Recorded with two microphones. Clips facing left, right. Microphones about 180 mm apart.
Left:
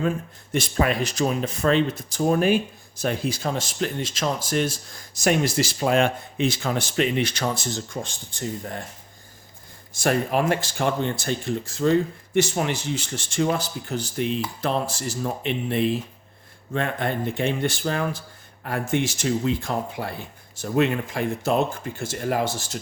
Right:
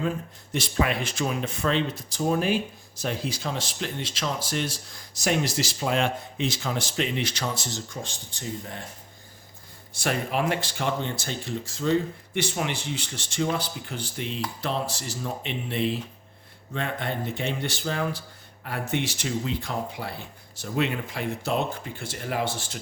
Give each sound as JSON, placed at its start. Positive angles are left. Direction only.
{"t": 0.5, "sound": "speech", "side_deg": 50}
{"t": 10.0, "sound": "speech", "side_deg": 45}